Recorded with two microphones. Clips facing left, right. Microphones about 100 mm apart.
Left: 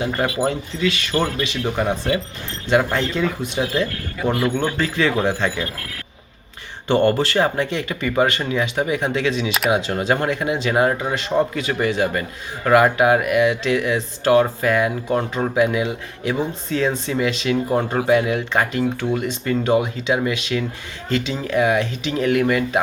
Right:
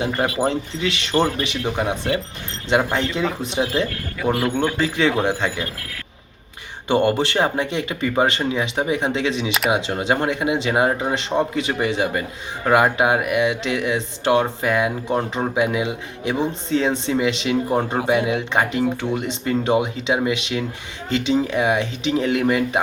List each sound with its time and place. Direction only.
0.4 s speech: 20° right (ahead or behind)
1.7 s speech: 10° right (ahead or behind)
6.8 s speech: 15° right (ahead or behind)